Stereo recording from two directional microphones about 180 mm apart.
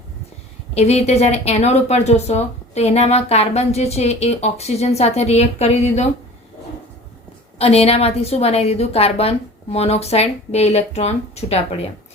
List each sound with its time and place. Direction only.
0.7 s speech: 35° left (ahead or behind)
7.6 s speech: 35° left (ahead or behind)